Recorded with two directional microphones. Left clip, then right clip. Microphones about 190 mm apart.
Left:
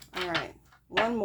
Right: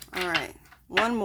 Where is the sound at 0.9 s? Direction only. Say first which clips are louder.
Right 3 dB; 35° right (ahead or behind).